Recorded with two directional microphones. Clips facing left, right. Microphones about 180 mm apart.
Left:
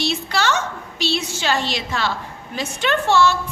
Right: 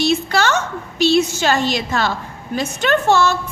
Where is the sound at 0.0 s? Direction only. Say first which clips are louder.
Right 5 dB; 50° right (ahead or behind).